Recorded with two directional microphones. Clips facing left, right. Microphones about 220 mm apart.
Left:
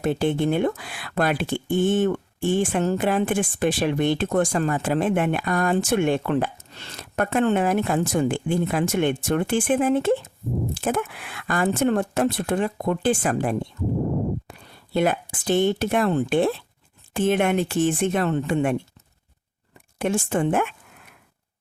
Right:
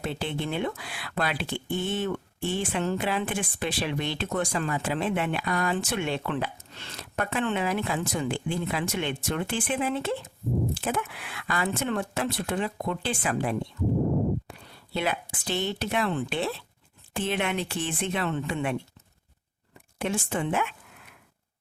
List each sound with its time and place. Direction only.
0.0 s speech: 45° left (ahead or behind)
14.9 s speech: 50° left (ahead or behind)
20.0 s speech: 50° left (ahead or behind)